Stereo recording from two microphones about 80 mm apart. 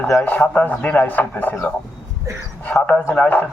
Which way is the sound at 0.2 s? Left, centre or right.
Centre.